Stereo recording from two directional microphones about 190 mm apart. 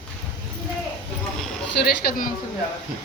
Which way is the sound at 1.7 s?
60° left (ahead or behind).